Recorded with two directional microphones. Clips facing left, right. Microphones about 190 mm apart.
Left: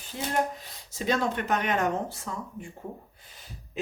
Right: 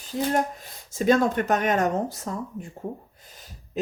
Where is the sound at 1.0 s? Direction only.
50° right (ahead or behind).